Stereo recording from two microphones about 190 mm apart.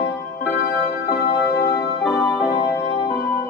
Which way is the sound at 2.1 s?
20° left (ahead or behind).